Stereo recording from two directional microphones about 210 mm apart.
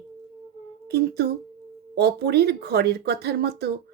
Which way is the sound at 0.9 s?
50° right (ahead or behind).